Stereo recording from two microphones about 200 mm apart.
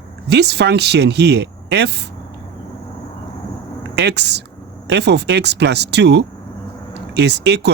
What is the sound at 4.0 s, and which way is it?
Speech, 60° right (ahead or behind).